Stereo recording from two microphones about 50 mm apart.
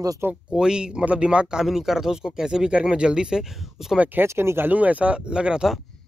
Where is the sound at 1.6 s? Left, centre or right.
Centre.